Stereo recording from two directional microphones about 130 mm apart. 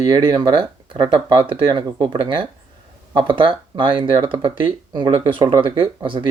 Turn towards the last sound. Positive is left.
turn(degrees=-40)  # may be behind; listen again after turning